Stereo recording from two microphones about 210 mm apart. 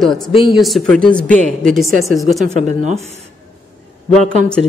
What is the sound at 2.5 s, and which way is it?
Speech, 35° right (ahead or behind).